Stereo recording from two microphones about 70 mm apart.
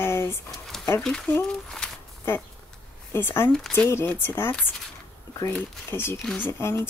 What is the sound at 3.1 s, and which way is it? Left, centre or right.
Speech, left.